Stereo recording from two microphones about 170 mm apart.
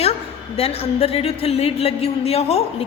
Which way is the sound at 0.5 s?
35° left (ahead or behind).